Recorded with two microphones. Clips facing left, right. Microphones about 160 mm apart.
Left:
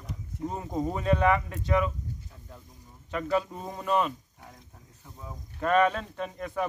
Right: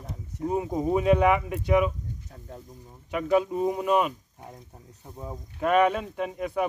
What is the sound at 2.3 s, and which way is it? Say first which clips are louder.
Speech: right 6 dB; 40° right (ahead or behind).